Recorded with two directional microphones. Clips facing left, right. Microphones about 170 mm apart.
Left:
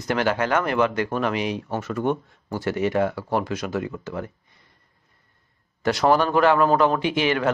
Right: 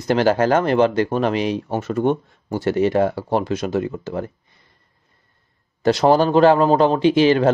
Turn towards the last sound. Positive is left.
turn(degrees=-30)  # may be behind; listen again after turning